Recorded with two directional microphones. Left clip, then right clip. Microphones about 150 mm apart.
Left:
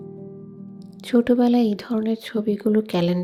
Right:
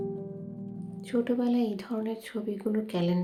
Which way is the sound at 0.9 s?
60° left (ahead or behind).